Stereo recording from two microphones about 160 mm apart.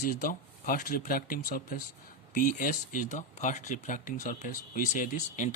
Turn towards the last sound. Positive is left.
turn(degrees=55)  # may be behind; listen again after turning